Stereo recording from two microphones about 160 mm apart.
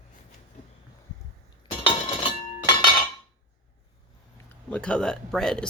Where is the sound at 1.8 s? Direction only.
35° left (ahead or behind).